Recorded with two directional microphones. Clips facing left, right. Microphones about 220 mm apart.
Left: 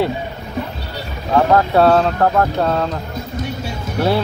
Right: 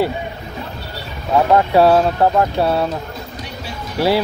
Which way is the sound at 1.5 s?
10° right (ahead or behind).